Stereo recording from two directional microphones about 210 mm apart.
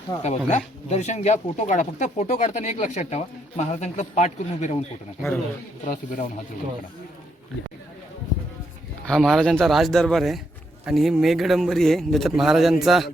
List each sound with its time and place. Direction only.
0.2 s speech: 35° left (ahead or behind)
5.9 s speech: 40° left (ahead or behind)
9.0 s a man's voice: centre (ahead or behind)